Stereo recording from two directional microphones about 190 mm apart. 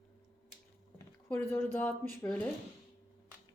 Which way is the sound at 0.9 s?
10° left (ahead or behind).